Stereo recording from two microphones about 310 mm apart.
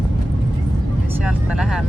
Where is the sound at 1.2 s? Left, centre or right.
Centre.